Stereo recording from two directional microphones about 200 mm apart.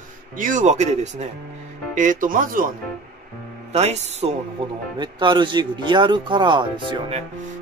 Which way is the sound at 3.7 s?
35° right (ahead or behind).